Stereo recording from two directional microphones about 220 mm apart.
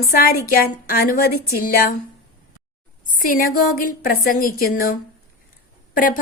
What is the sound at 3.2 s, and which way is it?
A woman's voice, 40° left (ahead or behind).